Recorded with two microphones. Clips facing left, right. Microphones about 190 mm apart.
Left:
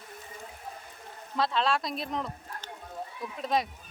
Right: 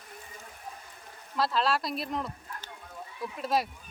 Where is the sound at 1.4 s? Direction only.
Centre (ahead or behind).